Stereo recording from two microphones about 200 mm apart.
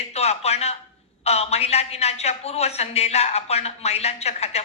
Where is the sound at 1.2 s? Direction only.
30° left (ahead or behind).